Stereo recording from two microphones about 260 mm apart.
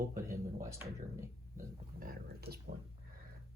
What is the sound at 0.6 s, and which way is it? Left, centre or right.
Speech, centre.